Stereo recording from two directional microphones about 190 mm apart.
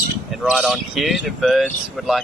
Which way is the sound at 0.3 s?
Centre (ahead or behind).